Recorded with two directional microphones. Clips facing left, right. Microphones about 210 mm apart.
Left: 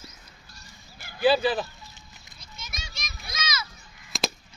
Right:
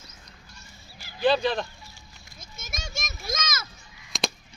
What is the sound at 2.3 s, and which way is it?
Children playing, 45° right (ahead or behind).